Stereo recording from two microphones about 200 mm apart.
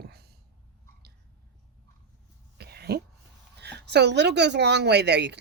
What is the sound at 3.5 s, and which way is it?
A woman's voice, 60° right (ahead or behind).